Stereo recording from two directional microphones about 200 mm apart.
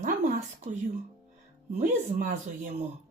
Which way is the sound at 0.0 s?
50° right (ahead or behind).